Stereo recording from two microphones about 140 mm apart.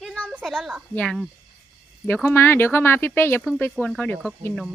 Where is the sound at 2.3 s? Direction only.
15° left (ahead or behind).